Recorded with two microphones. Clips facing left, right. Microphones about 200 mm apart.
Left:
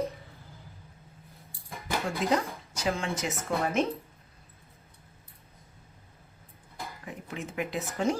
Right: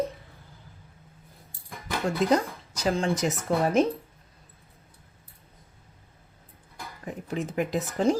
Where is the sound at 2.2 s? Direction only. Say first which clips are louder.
Right 6 dB; 40° right (ahead or behind).